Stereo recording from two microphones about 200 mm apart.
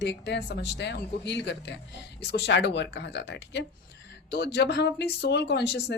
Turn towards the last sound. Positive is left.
turn(degrees=55)  # may be behind; listen again after turning